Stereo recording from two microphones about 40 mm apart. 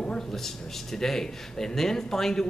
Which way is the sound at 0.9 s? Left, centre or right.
Centre.